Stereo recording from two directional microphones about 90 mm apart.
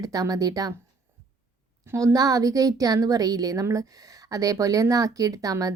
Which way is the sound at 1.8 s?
35° right (ahead or behind).